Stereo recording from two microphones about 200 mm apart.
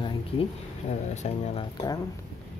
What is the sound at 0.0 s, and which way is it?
Speech, 30° left (ahead or behind).